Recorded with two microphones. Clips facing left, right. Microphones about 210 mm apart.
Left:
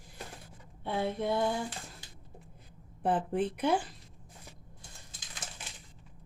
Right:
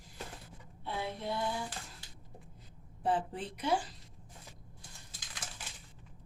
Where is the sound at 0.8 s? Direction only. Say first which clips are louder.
Left 6 dB; 55° left (ahead or behind).